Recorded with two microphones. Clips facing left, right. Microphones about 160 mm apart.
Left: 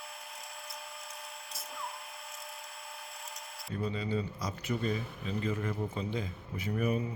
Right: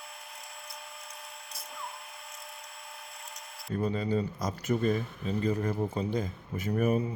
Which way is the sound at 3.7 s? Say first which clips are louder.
Right 5 dB; 45° right (ahead or behind).